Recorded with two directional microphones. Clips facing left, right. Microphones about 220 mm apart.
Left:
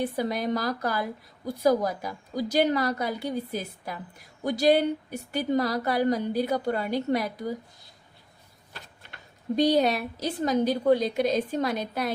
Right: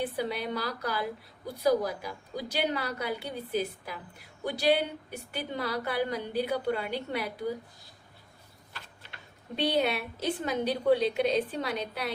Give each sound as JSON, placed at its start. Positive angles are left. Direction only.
{"t": 0.0, "sound": "a woman's voice", "side_deg": 40}
{"t": 9.6, "sound": "a woman's voice", "side_deg": 40}